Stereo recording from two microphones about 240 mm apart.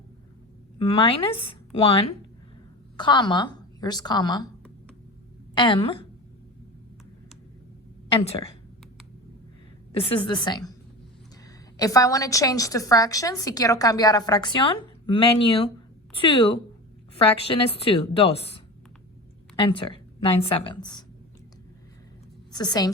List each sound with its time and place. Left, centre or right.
0.8 s a woman's voice: left
5.5 s a woman's voice: left
8.1 s a woman's voice: left
10.0 s a woman's voice: left
11.8 s a woman's voice: centre
22.5 s a woman's voice: centre